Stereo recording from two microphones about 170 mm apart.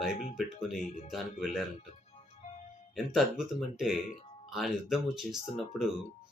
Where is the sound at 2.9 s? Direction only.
Centre (ahead or behind).